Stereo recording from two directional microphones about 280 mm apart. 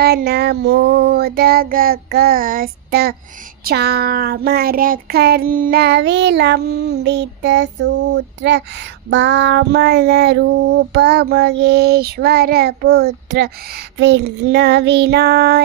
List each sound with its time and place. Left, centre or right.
0.0 s child singing: right